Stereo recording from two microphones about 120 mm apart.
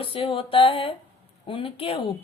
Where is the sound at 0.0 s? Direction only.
50° left (ahead or behind).